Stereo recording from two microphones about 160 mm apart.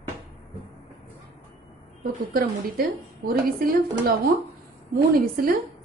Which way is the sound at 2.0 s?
65° right (ahead or behind).